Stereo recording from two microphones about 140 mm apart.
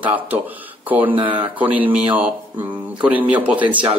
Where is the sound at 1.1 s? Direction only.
35° right (ahead or behind).